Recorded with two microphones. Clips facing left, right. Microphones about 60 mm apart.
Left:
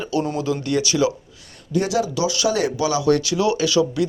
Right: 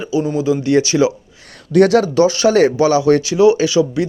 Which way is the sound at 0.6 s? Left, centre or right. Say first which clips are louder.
Right 6 dB; right.